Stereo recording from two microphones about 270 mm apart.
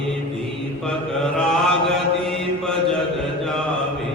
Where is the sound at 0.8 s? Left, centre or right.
Centre.